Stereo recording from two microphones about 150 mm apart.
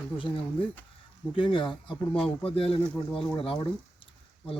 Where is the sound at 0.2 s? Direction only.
35° left (ahead or behind).